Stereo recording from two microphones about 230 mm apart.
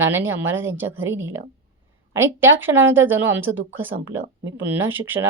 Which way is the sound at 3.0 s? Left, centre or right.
Centre.